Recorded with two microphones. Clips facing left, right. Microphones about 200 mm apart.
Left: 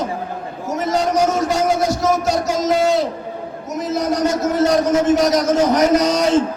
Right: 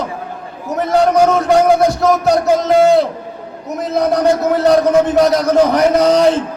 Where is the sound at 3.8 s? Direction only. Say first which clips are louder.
Right 5 dB; 60° right (ahead or behind).